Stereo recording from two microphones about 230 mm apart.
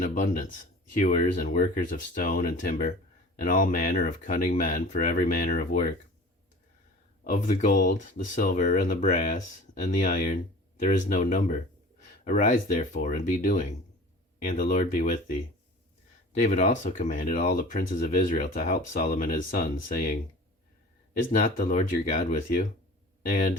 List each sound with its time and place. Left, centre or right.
0.0 s speech: left
7.3 s speech: left
16.4 s speech: left
21.3 s speech: left